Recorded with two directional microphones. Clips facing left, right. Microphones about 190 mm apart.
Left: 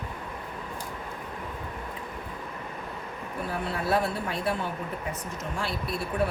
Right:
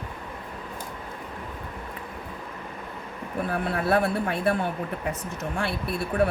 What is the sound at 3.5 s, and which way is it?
Speech, 55° right (ahead or behind).